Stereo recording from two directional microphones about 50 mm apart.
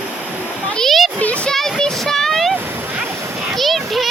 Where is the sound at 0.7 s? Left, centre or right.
Centre.